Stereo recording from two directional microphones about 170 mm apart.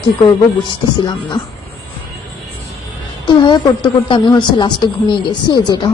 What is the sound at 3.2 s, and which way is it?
A woman's voice, 25° left (ahead or behind).